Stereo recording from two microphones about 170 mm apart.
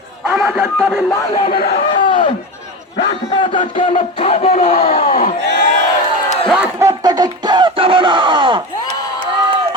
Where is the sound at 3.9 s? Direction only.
35° left (ahead or behind).